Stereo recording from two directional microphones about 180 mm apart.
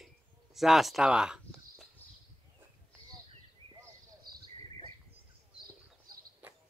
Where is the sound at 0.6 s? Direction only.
Centre (ahead or behind).